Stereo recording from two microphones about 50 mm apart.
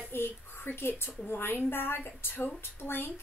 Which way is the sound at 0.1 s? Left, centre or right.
Left.